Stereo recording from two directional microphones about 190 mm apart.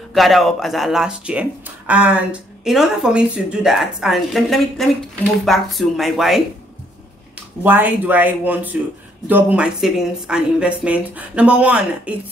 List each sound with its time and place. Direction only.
0.1 s speech: centre (ahead or behind)
7.6 s speech: 10° right (ahead or behind)